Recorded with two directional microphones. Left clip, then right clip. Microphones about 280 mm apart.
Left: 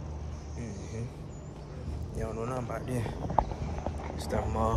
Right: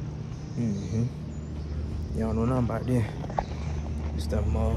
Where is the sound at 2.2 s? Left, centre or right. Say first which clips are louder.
Right 6 dB; centre.